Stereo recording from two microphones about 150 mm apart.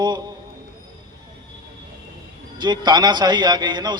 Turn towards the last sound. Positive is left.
turn(degrees=-30)  # may be behind; listen again after turning